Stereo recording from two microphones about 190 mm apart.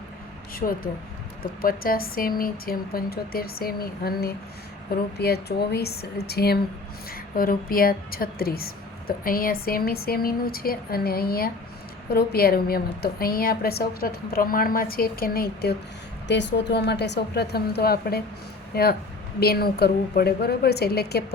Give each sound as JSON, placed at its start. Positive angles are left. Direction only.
{"t": 0.5, "sound": "a woman's voice", "side_deg": 50}
{"t": 16.2, "sound": "a woman's voice", "side_deg": 70}